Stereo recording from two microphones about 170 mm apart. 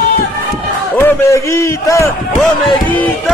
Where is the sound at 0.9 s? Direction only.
15° left (ahead or behind).